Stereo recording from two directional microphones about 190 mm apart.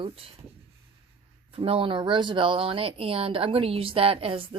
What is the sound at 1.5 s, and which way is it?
A woman's voice, 30° right (ahead or behind).